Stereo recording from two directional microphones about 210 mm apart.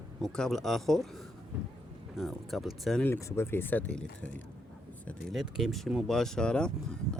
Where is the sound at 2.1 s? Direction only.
Centre (ahead or behind).